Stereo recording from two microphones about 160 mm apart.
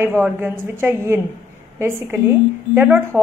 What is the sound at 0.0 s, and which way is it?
Speech, 15° right (ahead or behind).